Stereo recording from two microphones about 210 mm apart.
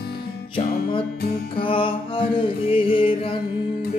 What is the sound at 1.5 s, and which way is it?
Music, 25° left (ahead or behind).